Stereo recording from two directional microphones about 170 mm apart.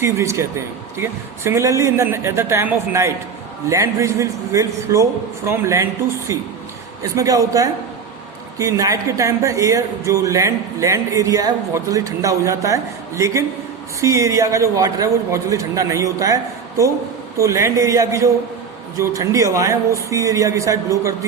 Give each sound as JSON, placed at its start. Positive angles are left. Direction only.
{"t": 0.0, "sound": "a man's voice", "side_deg": -15}
{"t": 1.5, "sound": "a man's voice", "side_deg": -15}